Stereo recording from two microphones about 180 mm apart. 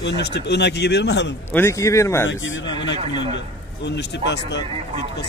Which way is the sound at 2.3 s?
90° left.